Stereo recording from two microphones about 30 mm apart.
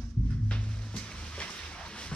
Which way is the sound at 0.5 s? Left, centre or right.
Left.